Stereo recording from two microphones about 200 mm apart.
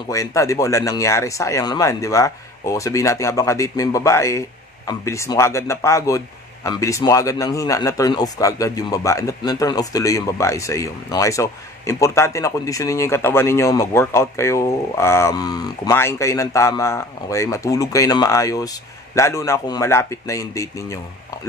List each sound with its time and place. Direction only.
0.1 s speech: 15° left (ahead or behind)